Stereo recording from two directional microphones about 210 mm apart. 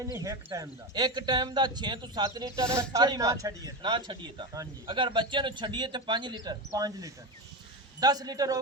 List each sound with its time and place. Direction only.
0.2 s speech: 15° right (ahead or behind)